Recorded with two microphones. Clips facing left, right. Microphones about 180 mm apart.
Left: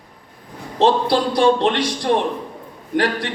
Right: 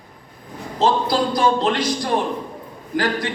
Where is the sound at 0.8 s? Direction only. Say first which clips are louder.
Left 2 dB; 70° left (ahead or behind).